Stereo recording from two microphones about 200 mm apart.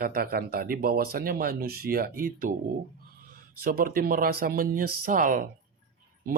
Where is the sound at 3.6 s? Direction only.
45° right (ahead or behind).